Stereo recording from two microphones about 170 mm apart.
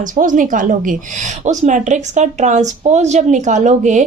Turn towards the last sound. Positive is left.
turn(degrees=-45)  # may be behind; listen again after turning